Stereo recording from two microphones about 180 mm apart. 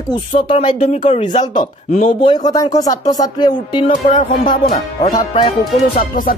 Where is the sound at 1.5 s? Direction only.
45° left (ahead or behind).